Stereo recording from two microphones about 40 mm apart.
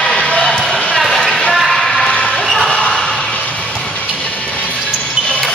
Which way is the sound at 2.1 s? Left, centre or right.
Left.